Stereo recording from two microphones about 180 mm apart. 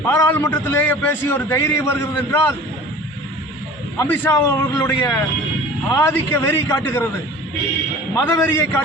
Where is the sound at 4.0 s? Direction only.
15° left (ahead or behind).